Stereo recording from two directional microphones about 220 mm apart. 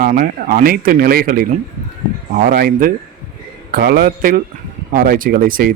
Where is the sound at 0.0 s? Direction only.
40° right (ahead or behind).